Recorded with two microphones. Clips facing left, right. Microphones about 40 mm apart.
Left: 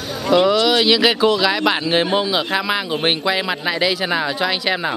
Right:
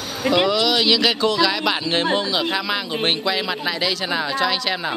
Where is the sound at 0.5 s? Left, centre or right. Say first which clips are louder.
Left 3 dB; centre.